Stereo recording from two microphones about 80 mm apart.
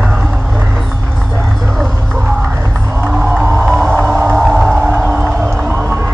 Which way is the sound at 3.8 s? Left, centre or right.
Right.